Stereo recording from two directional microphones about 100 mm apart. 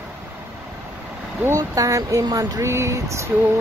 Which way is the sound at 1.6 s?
35° right (ahead or behind).